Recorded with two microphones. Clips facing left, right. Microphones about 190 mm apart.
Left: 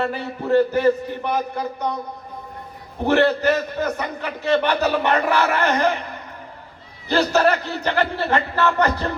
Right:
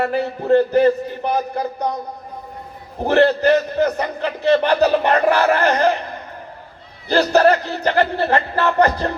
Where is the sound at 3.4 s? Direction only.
30° right (ahead or behind).